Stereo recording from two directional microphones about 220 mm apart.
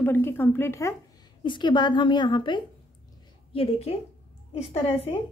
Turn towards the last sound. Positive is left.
turn(degrees=25)  # may be behind; listen again after turning